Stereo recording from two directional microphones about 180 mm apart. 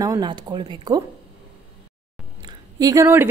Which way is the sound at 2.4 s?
20° right (ahead or behind).